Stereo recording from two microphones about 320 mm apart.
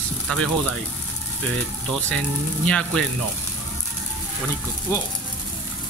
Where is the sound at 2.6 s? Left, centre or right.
Centre.